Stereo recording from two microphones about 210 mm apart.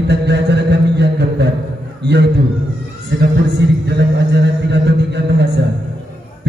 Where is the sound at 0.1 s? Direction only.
55° right (ahead or behind).